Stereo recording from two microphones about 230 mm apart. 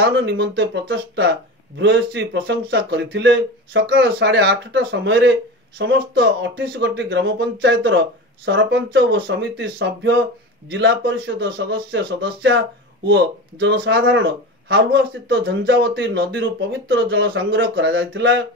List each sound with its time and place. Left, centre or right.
0.0 s speech: right